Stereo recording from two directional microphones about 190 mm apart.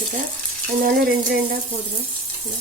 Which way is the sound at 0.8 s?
50° right (ahead or behind).